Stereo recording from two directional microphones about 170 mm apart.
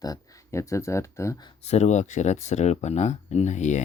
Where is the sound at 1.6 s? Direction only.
40° left (ahead or behind).